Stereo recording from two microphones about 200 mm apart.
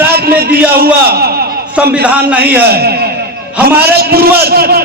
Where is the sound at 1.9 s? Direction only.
5° right (ahead or behind).